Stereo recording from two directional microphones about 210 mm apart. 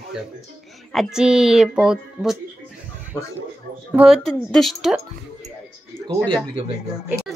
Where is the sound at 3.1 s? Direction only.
10° left (ahead or behind).